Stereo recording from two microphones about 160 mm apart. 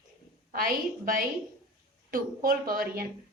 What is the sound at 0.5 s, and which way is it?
A woman's voice, 60° right (ahead or behind).